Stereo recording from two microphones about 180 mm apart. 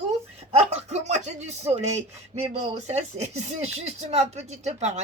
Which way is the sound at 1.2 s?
40° right (ahead or behind).